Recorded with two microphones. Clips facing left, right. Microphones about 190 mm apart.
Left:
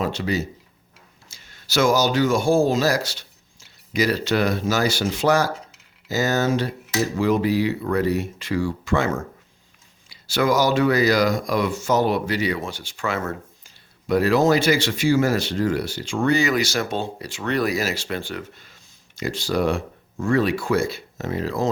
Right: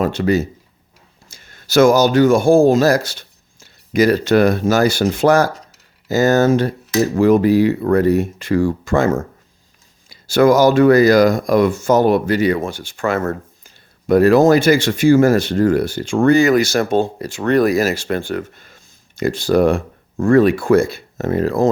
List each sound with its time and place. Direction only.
0.0 s speech: 55° right (ahead or behind)